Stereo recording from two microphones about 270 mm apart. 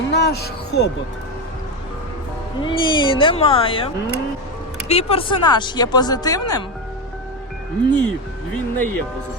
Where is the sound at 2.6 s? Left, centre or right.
Centre.